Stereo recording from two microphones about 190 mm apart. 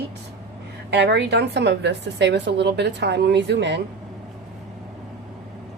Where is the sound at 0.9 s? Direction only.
65° right (ahead or behind).